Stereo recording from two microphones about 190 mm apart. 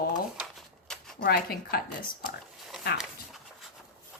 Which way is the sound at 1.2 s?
55° left (ahead or behind).